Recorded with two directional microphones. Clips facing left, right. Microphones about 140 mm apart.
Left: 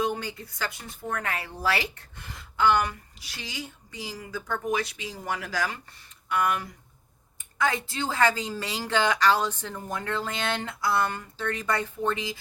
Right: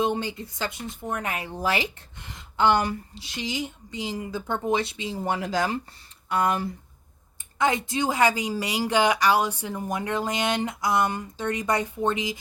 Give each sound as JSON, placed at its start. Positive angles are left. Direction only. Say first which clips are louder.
{"t": 0.0, "sound": "a woman's voice", "louder": "right 3 dB", "side_deg": -25}